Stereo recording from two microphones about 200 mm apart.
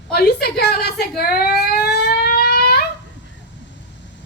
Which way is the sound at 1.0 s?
50° left (ahead or behind).